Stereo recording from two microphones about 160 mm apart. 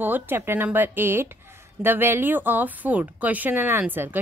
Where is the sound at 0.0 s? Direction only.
10° right (ahead or behind).